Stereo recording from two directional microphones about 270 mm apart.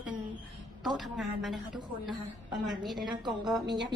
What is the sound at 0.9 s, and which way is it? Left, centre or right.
Speech, centre.